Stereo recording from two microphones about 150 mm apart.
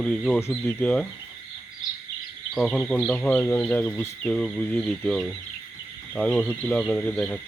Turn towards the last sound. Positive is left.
turn(degrees=5)  # may be behind; listen again after turning